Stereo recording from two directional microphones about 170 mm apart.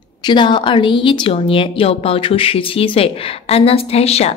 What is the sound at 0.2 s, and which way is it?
Speech, 30° left (ahead or behind).